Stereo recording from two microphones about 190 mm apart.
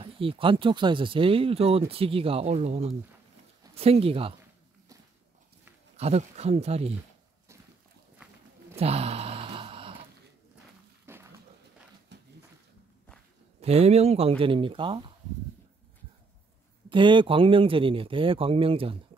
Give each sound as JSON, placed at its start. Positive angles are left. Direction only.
{"t": 0.0, "sound": "speech", "side_deg": -30}
{"t": 5.9, "sound": "speech", "side_deg": -35}
{"t": 8.7, "sound": "a sound", "side_deg": -30}
{"t": 11.1, "sound": "dog", "side_deg": -15}
{"t": 12.1, "sound": "a sound", "side_deg": -65}
{"t": 13.6, "sound": "speech", "side_deg": -30}
{"t": 16.9, "sound": "speech", "side_deg": -25}